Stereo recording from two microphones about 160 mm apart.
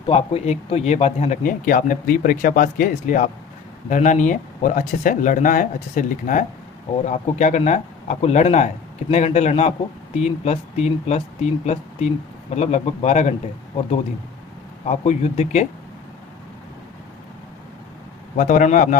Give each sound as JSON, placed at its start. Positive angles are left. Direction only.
{"t": 0.1, "sound": "speech", "side_deg": 40}
{"t": 14.8, "sound": "speech", "side_deg": 45}
{"t": 18.3, "sound": "speech", "side_deg": 55}